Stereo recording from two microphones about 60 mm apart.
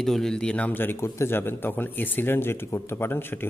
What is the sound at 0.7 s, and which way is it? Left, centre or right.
A man's voice, left.